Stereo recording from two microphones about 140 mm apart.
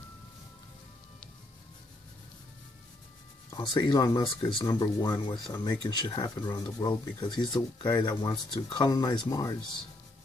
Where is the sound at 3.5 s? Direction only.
30° left (ahead or behind).